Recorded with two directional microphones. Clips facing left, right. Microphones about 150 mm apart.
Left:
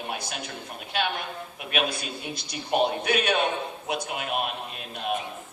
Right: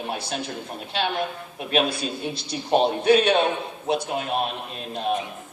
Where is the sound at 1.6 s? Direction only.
30° right (ahead or behind).